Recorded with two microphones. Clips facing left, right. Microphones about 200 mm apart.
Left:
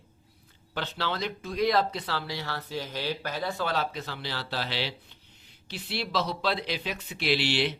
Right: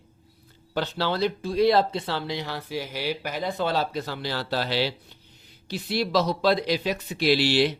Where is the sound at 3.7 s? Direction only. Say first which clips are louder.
Right 4 dB; 40° right (ahead or behind).